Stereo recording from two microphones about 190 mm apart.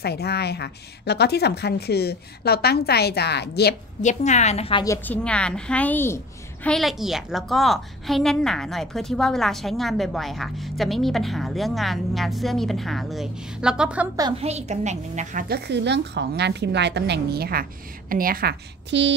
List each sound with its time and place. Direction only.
0.0 s a woman's voice: 60° left (ahead or behind)
4.0 s a woman's voice: 40° left (ahead or behind)
4.8 s a woman's voice: 10° left (ahead or behind); by 14.0 s 5° right (ahead or behind)
14.4 s a woman's voice: 35° right (ahead or behind)
15.4 s a woman's voice: 60° right (ahead or behind)